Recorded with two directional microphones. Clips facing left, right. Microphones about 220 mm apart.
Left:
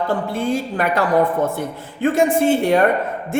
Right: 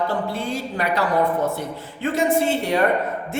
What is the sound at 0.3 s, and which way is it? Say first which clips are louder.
A woman's voice: left 5 dB; 50° left (ahead or behind).